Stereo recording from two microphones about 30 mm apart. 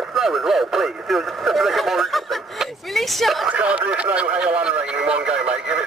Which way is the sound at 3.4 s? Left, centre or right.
Right.